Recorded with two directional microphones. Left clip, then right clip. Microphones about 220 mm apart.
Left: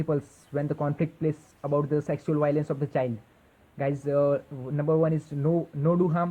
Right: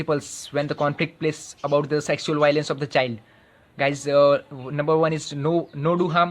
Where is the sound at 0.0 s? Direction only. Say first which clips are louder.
Right 5 dB; 30° right (ahead or behind).